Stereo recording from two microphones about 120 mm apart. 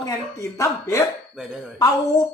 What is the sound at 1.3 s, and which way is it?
Speech, 5° right (ahead or behind).